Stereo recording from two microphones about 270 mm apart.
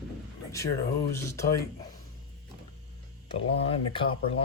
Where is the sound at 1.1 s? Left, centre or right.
Centre.